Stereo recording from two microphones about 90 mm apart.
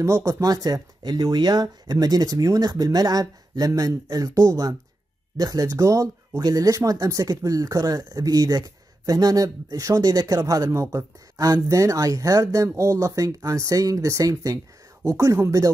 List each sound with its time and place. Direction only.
0.0 s speech: 35° right (ahead or behind)